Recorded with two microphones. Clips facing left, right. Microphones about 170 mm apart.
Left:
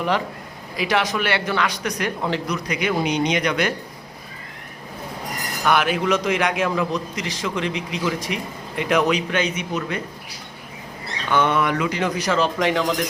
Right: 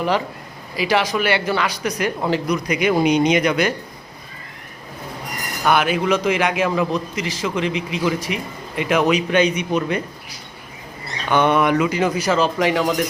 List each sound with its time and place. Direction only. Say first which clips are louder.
0.8 s a man's voice: right 3 dB; centre (ahead or behind)
5.6 s a man's voice: right 2 dB; centre (ahead or behind)
9.3 s speech: right 6 dB; 15° right (ahead or behind)
11.3 s a man's voice: right 3 dB; 15° right (ahead or behind)